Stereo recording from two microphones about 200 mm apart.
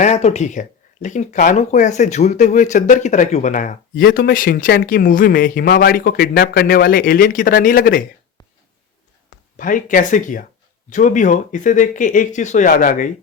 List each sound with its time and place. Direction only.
0.0 s speech: 35° left (ahead or behind)
9.6 s speech: 40° left (ahead or behind)